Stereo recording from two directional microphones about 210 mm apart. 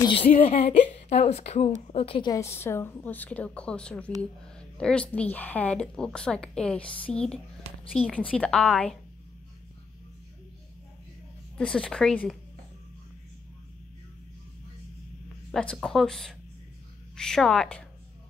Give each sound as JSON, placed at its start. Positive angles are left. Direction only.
{"t": 0.0, "sound": "a woman's voice", "side_deg": 25}
{"t": 11.5, "sound": "a woman's voice", "side_deg": 5}
{"t": 15.5, "sound": "a woman's voice", "side_deg": 5}